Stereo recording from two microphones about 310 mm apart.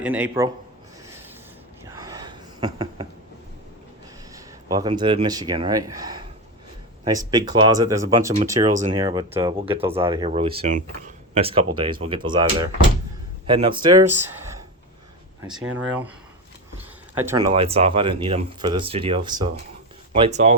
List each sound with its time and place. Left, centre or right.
0.0 s a man's voice: centre
1.8 s a sound: centre
4.4 s speech: centre
8.4 s speech: right
15.4 s a man's voice: centre
17.5 s speech: centre